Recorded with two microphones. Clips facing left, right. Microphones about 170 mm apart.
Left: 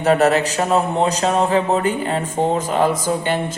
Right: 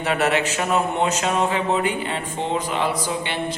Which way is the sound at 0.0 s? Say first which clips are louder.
Left 6 dB; 40° left (ahead or behind).